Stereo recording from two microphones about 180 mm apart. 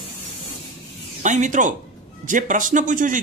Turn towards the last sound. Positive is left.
turn(degrees=-45)  # may be behind; listen again after turning